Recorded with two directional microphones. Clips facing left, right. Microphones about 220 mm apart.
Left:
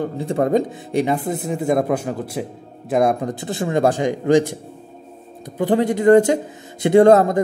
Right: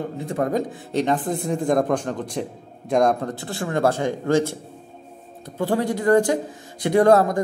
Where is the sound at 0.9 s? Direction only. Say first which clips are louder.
Left 2 dB; 10° left (ahead or behind).